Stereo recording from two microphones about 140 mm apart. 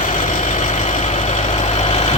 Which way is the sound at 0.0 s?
65° left (ahead or behind).